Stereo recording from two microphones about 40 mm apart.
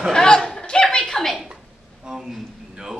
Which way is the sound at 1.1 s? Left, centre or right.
Centre.